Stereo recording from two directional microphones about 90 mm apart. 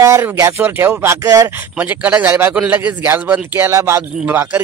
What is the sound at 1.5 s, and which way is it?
Speech, 20° right (ahead or behind).